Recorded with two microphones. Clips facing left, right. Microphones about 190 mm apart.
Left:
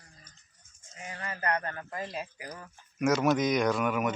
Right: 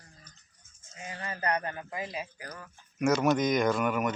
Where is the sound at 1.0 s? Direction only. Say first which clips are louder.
Right 1 dB; 20° right (ahead or behind).